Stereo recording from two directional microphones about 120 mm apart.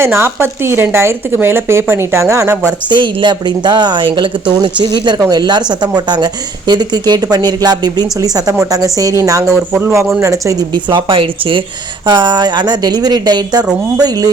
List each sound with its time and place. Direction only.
0.0 s speech: 20° right (ahead or behind)
2.9 s speech: 40° right (ahead or behind); by 10.5 s 25° right (ahead or behind)
10.8 s speech: 45° right (ahead or behind)